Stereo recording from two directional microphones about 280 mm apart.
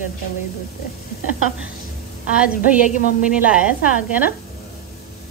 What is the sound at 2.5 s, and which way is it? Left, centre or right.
A woman's voice, left.